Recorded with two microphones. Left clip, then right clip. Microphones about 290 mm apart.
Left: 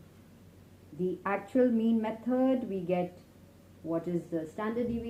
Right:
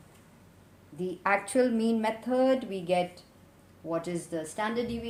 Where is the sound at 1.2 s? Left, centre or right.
Right.